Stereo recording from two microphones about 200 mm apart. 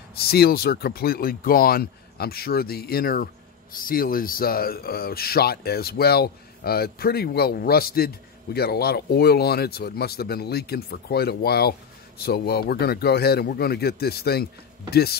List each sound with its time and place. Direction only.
0.1 s speech: 50° left (ahead or behind)